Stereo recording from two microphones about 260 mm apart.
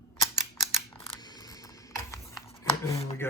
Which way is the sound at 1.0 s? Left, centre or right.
Centre.